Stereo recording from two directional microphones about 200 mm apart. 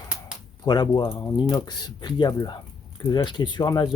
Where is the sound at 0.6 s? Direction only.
20° left (ahead or behind).